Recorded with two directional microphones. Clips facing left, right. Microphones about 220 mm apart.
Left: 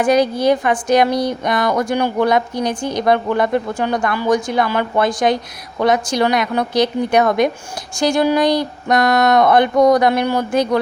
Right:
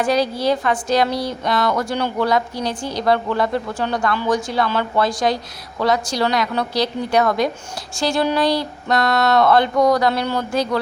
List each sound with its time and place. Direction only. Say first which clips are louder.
0.0 s a woman's voice: left 4 dB; 20° left (ahead or behind)